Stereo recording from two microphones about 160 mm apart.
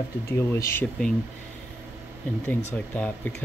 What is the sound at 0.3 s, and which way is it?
Speech, 15° left (ahead or behind).